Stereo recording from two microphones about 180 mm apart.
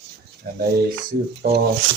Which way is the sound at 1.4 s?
60° right (ahead or behind).